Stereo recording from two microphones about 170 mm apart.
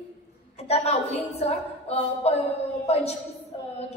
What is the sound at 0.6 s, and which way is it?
A woman's voice, 40° left (ahead or behind).